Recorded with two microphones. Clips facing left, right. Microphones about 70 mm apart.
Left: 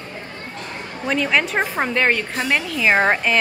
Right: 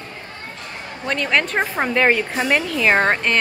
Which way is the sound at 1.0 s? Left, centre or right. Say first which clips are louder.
Left 1 dB; centre.